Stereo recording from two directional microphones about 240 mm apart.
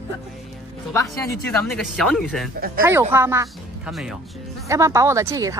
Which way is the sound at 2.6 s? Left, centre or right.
Right.